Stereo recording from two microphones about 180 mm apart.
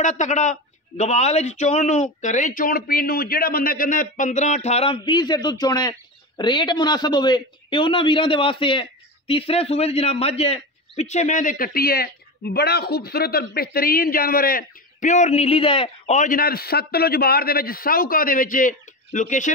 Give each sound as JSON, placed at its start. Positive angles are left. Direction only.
{"t": 0.0, "sound": "a man's voice", "side_deg": 40}
{"t": 16.2, "sound": "a man's voice", "side_deg": 50}